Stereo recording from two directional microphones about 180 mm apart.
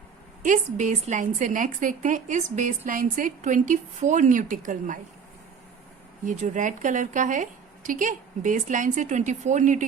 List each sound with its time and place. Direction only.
0.4 s a woman's voice: 45° right (ahead or behind)
6.2 s a woman's voice: 45° right (ahead or behind)